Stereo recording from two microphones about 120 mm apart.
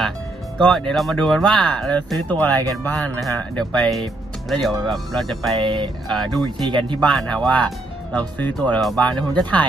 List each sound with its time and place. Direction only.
0.6 s speech: 5° left (ahead or behind)
5.6 s speech: 45° right (ahead or behind)
6.0 s speech: centre (ahead or behind)